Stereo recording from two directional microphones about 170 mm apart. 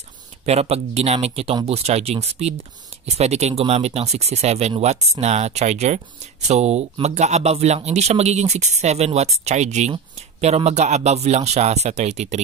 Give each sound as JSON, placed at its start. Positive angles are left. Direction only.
{"t": 0.5, "sound": "speech", "side_deg": -40}